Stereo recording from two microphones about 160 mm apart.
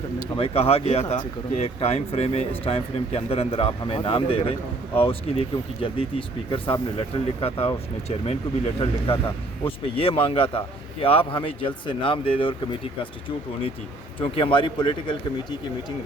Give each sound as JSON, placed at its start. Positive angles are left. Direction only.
{"t": 0.3, "sound": "speech", "side_deg": 35}